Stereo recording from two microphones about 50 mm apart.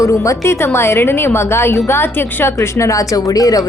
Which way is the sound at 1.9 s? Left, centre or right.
Left.